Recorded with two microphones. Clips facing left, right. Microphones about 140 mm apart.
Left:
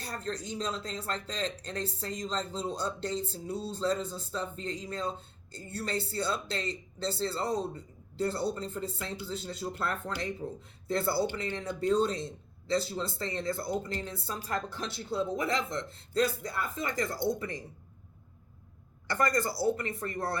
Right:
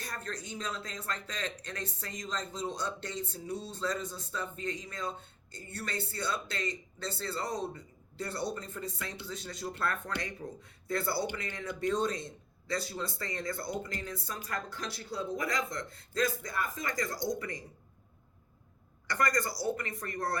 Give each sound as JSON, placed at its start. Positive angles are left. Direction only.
{"t": 0.0, "sound": "speech", "side_deg": 30}
{"t": 19.0, "sound": "speech", "side_deg": 30}